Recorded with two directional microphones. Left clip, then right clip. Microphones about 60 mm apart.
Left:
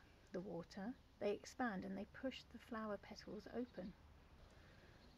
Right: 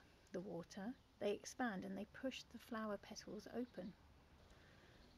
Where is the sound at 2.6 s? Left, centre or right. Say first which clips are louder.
Right 1 dB; right.